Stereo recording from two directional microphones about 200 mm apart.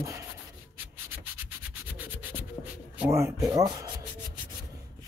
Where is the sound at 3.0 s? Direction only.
15° right (ahead or behind).